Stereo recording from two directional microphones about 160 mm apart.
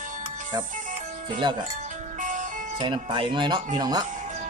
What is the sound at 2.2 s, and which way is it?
Music, 50° right (ahead or behind).